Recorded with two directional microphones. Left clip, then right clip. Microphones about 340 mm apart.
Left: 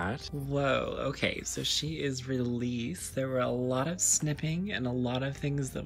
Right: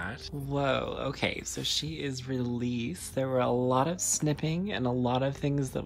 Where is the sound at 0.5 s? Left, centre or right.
Centre.